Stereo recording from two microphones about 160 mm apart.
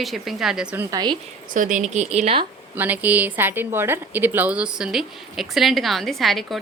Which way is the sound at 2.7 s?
10° right (ahead or behind).